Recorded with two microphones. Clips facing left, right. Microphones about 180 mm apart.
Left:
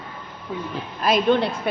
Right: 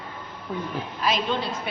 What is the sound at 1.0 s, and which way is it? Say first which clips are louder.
Speech: left 7 dB; 55° left (ahead or behind).